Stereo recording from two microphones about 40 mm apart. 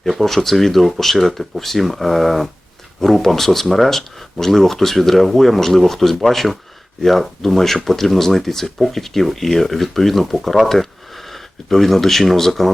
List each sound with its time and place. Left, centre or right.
0.0 s speech: centre